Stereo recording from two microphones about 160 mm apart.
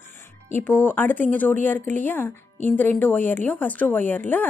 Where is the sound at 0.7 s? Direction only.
10° left (ahead or behind).